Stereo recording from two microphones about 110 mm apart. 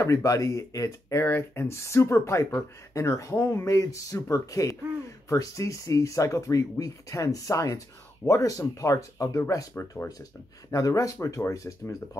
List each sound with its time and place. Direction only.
0.0 s speech: 30° left (ahead or behind)